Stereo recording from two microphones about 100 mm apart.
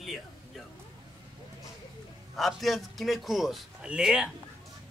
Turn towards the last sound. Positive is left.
turn(degrees=-10)  # may be behind; listen again after turning